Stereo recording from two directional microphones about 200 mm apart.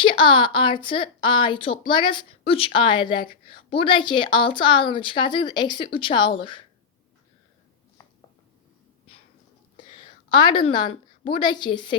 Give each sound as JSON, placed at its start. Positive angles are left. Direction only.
{"t": 0.0, "sound": "speech", "side_deg": 25}
{"t": 10.2, "sound": "speech", "side_deg": 25}